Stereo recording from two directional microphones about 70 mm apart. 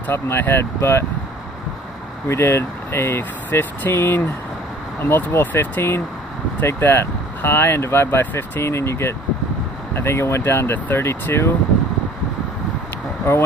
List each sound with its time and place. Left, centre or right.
0.1 s speech: left
2.3 s speech: left